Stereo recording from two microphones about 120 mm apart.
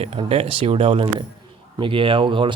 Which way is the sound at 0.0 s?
55° right (ahead or behind).